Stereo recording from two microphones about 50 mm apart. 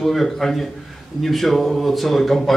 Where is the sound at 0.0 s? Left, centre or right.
Centre.